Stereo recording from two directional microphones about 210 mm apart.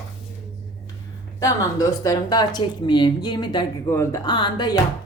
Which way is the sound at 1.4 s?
15° left (ahead or behind).